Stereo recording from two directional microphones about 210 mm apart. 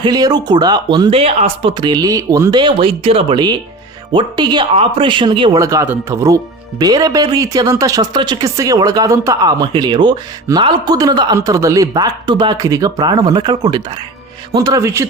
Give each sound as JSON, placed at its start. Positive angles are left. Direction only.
{"t": 0.0, "sound": "speech", "side_deg": -20}